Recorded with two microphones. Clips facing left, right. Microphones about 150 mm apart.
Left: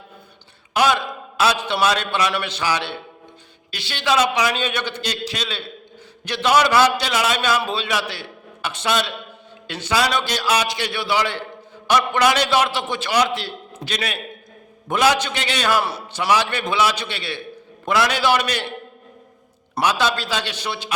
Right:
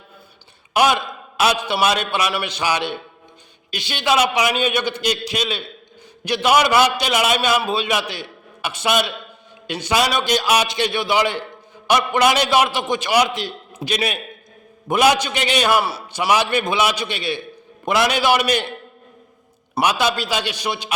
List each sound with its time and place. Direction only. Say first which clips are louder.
0.7 s a man's voice: right 1 dB; 15° right (ahead or behind)
15.8 s a man's voice: right 1 dB; 5° right (ahead or behind)
19.8 s a man's voice: right 1 dB; 15° right (ahead or behind)